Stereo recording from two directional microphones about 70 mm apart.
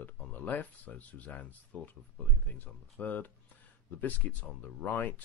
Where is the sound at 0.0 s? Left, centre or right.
Left.